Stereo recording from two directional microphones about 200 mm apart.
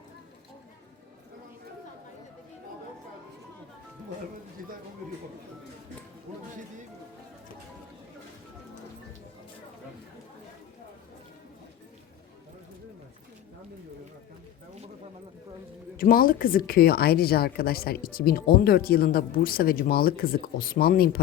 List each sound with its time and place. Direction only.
16.0 s a woman's voice: 45° left (ahead or behind)